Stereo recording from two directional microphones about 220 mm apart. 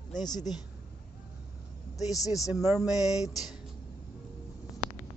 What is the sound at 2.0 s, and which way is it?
Speech, 15° left (ahead or behind).